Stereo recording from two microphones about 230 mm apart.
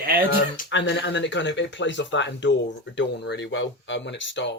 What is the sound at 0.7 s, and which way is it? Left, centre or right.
Speech, left.